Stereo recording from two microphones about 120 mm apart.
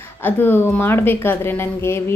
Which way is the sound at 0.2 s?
15° left (ahead or behind).